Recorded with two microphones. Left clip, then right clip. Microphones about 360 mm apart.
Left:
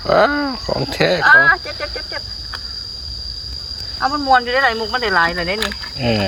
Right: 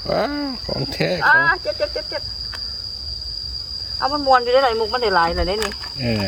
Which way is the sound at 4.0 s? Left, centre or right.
Centre.